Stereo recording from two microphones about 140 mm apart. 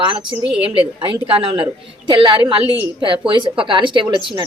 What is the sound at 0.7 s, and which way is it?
A woman's voice, 40° right (ahead or behind).